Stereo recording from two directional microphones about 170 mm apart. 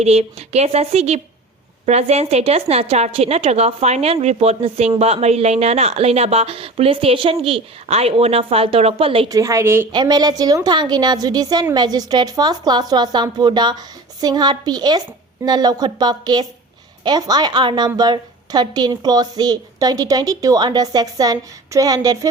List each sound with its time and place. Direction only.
0.0 s a woman's voice: 35° right (ahead or behind)
9.3 s a woman's voice: 20° right (ahead or behind)